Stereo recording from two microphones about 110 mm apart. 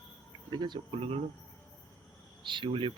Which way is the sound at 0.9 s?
65° right (ahead or behind).